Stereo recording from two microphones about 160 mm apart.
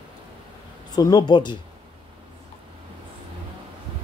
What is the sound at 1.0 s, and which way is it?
Speech, 25° left (ahead or behind).